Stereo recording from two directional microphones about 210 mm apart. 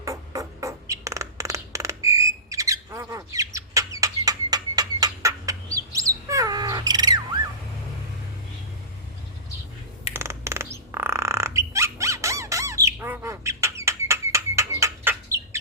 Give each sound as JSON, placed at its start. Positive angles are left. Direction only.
{"t": 0.0, "sound": "music", "side_deg": -15}
{"t": 2.0, "sound": "rodents", "side_deg": -15}
{"t": 2.9, "sound": "bird", "side_deg": -15}
{"t": 10.1, "sound": "a sound", "side_deg": -10}